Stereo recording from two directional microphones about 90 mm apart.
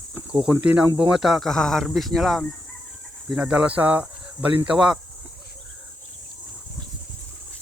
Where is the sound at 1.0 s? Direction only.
5° right (ahead or behind).